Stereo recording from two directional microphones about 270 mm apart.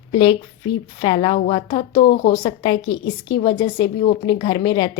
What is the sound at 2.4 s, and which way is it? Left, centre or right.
A woman's voice, centre.